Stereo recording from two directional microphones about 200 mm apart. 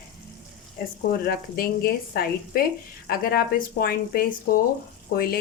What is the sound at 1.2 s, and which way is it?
Speech, 50° left (ahead or behind).